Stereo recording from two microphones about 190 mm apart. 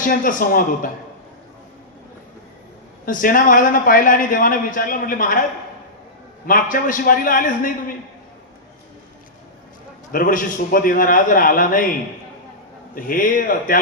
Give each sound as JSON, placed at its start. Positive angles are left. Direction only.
{"t": 0.0, "sound": "a man's voice", "side_deg": 45}
{"t": 3.1, "sound": "a man's voice", "side_deg": 45}
{"t": 6.5, "sound": "a man's voice", "side_deg": 45}
{"t": 10.1, "sound": "a man's voice", "side_deg": 45}